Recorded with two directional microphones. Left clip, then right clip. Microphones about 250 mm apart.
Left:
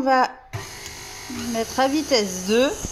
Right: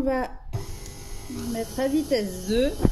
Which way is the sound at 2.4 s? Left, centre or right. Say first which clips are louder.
Left 4 dB; left.